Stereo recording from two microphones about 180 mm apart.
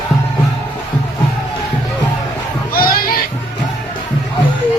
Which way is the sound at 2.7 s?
55° left (ahead or behind).